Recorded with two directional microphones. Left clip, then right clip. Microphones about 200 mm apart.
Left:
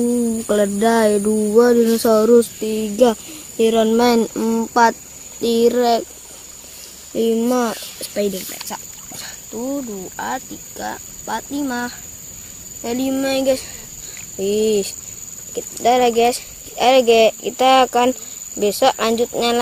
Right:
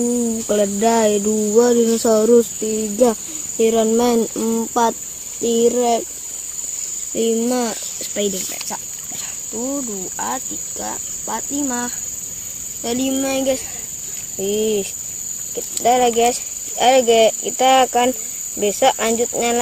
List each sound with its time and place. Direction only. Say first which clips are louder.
0.5 s cricket: even; centre (ahead or behind)
4.2 s speech: left 1 dB; 10° left (ahead or behind)
5.4 s a child's voice: left 1 dB; 20° right (ahead or behind)
5.7 s cricket: left 1 dB; 5° left (ahead or behind)
7.2 s speech: left 2 dB; 5° left (ahead or behind)
12.8 s cricket: even; centre (ahead or behind)
14.4 s speech: left 2 dB; 15° left (ahead or behind)